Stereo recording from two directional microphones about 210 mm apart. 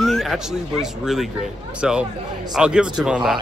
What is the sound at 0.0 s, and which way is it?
Speech, centre (ahead or behind).